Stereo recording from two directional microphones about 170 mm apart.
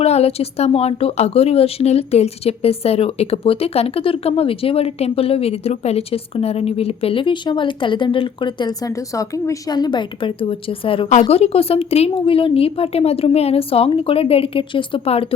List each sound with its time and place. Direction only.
0.0 s a woman's voice: 35° left (ahead or behind)